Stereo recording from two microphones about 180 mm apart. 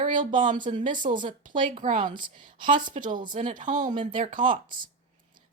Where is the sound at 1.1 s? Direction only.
25° right (ahead or behind).